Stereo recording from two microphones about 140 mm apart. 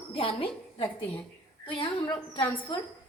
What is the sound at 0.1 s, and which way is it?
A woman's voice, 40° left (ahead or behind).